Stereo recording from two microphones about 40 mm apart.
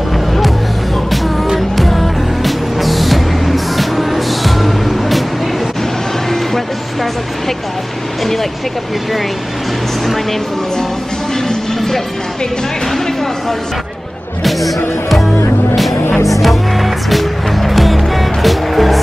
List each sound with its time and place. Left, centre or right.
1.8 s music: centre
11.4 s a sound: centre
16.3 s music: centre